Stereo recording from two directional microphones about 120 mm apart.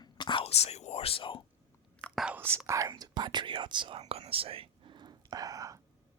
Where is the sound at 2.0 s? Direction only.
10° right (ahead or behind).